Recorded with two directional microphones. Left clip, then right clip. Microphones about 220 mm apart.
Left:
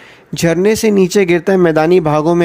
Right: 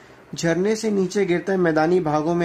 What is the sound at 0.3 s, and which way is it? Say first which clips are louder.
Speech: left 9 dB; 35° left (ahead or behind).